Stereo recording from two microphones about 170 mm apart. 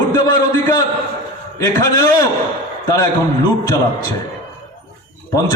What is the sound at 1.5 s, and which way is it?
Speech, 20° left (ahead or behind).